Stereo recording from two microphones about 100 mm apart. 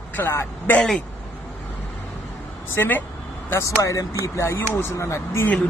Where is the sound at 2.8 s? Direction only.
20° left (ahead or behind).